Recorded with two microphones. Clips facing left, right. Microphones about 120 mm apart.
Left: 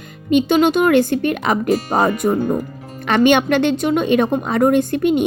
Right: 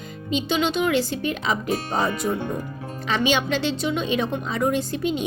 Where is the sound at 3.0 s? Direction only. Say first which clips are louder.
Left 9 dB; 60° left (ahead or behind).